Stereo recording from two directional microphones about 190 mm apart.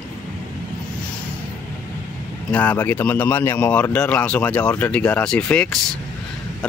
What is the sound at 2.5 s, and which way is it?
Speech, 10° left (ahead or behind).